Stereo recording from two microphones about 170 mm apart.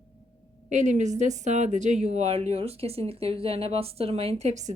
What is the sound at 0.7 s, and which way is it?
A woman's voice, 45° right (ahead or behind).